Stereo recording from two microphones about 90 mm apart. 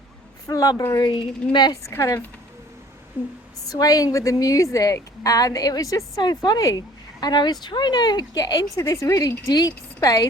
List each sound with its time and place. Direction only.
0.4 s a woman's voice: 40° left (ahead or behind)
1.4 s a woman's voice: 10° left (ahead or behind)
1.9 s a woman's voice: 35° left (ahead or behind)
3.2 s a woman's voice: 20° right (ahead or behind)
3.7 s a woman's voice: 45° left (ahead or behind)
6.4 s speech: 50° left (ahead or behind)